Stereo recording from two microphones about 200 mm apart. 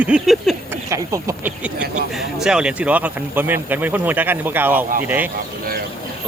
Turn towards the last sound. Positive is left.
turn(degrees=-10)  # may be behind; listen again after turning